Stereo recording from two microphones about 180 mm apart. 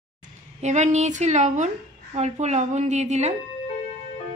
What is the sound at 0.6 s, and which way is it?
A woman's voice, 40° right (ahead or behind).